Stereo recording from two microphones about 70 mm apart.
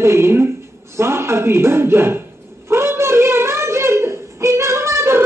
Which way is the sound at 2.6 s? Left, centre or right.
Right.